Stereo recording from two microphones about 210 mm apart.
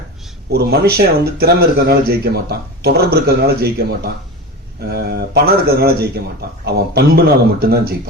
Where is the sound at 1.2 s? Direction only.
50° right (ahead or behind).